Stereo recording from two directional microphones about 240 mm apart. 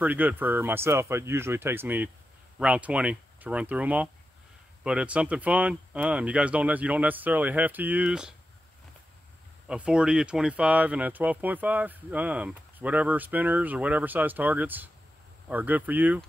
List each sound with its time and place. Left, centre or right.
0.0 s speech: centre
9.7 s speech: centre